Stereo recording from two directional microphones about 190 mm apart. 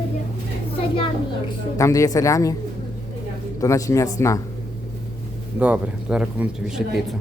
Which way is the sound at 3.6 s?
15° left (ahead or behind).